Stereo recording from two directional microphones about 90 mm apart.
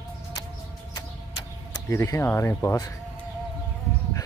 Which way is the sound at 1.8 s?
35° left (ahead or behind).